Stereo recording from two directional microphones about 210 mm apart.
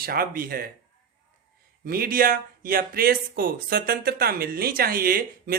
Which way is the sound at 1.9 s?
45° right (ahead or behind).